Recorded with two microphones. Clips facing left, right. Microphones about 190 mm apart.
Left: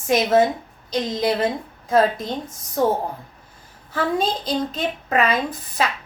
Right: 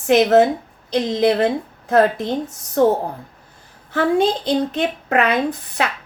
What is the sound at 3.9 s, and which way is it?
A woman's voice, 65° right (ahead or behind).